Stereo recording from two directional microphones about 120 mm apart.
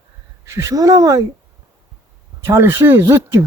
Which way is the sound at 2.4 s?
20° right (ahead or behind).